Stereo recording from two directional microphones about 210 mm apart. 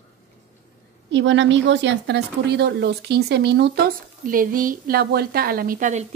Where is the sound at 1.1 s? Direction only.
60° right (ahead or behind).